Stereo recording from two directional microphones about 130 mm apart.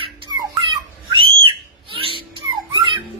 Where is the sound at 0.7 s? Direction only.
40° right (ahead or behind).